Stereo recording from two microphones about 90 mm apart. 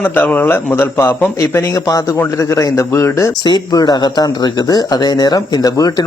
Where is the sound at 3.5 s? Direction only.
45° left (ahead or behind).